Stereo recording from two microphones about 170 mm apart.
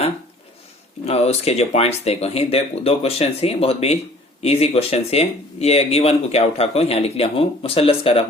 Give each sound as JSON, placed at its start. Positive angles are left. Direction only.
{"t": 1.0, "sound": "speech", "side_deg": 40}